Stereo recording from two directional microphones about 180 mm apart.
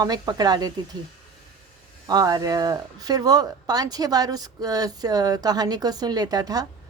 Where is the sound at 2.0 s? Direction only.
20° right (ahead or behind).